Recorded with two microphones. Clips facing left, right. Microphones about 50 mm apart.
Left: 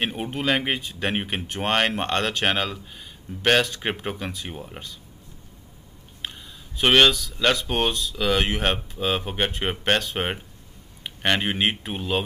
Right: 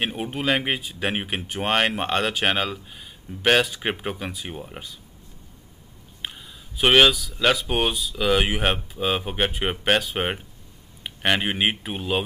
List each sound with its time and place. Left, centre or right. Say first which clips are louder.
0.0 s speech: even; centre
6.2 s speech: even; centre